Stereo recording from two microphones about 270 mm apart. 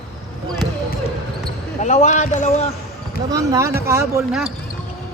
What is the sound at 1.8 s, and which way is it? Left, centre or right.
Speech, left.